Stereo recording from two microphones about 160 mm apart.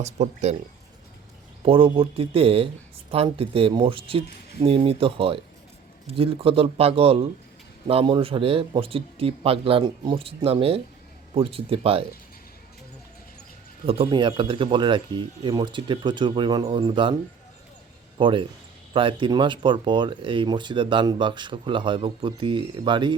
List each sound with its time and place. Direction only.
0.0 s speech: 45° right (ahead or behind)
1.6 s speech: 35° right (ahead or behind)
13.8 s speech: 35° right (ahead or behind)
18.2 s speech: 30° right (ahead or behind)